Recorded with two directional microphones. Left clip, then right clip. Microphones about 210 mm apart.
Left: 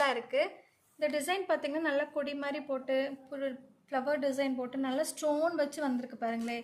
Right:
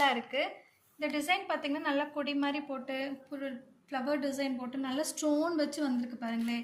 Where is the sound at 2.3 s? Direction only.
50° left (ahead or behind).